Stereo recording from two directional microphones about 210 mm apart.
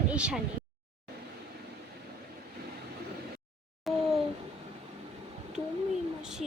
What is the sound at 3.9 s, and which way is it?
Babbling, centre (ahead or behind).